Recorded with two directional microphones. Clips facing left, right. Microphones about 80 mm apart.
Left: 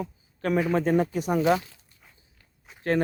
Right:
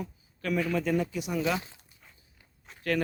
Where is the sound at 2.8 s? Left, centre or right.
Left.